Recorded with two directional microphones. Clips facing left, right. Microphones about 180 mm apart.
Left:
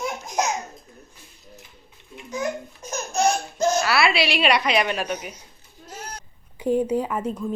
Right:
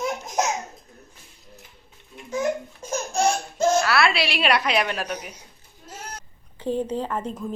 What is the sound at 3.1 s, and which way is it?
Baby laughter, 30° right (ahead or behind).